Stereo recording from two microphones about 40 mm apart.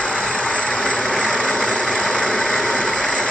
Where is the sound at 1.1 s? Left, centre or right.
Centre.